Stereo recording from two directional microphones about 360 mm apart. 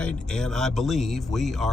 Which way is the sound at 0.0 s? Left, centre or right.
Centre.